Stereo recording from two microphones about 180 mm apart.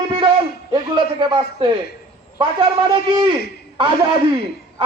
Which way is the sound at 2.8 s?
25° right (ahead or behind).